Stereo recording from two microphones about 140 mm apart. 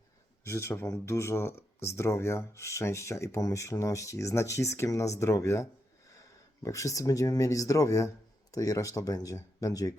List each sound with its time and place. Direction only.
0.4 s speech: 20° left (ahead or behind)